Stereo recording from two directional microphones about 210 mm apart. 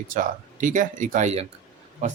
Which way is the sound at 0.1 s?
40° right (ahead or behind).